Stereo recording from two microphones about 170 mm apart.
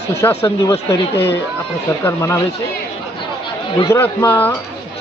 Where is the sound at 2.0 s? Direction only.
15° left (ahead or behind).